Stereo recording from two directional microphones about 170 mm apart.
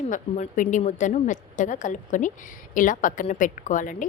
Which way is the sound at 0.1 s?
50° left (ahead or behind).